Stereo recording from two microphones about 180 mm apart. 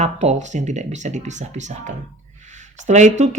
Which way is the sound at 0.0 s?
40° right (ahead or behind).